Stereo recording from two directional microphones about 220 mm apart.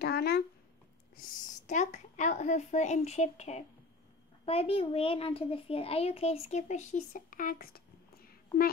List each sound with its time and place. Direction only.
0.0 s speech: 45° left (ahead or behind)
1.7 s a child's voice: 30° left (ahead or behind)